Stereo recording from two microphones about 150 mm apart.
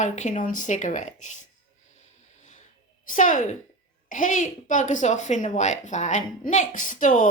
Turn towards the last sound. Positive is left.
turn(degrees=60)  # may be behind; listen again after turning